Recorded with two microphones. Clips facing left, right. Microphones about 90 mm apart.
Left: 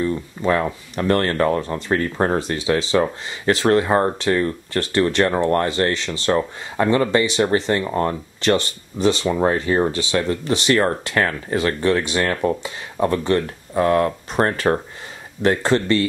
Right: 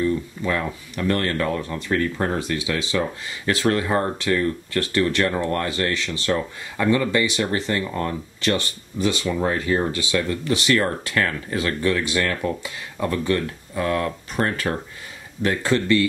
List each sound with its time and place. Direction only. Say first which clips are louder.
0.0 s speech: left 1 dB; 30° left (ahead or behind)